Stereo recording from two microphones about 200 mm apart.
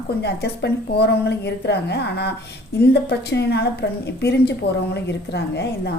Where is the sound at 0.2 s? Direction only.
55° left (ahead or behind).